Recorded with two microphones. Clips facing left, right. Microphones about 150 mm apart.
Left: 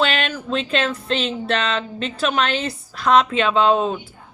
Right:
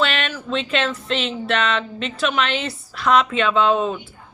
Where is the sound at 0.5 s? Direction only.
35° left (ahead or behind).